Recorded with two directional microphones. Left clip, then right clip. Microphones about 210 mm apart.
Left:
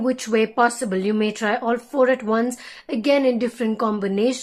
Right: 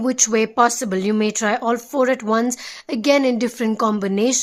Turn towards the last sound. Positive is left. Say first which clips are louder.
# right 2 dB
turn(degrees=-40)  # may be behind; listen again after turning